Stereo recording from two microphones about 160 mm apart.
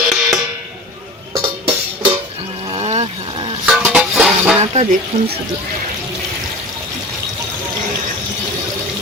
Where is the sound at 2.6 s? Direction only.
40° right (ahead or behind).